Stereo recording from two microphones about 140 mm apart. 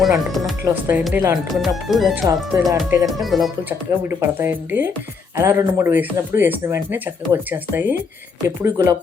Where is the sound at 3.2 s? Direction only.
Centre (ahead or behind).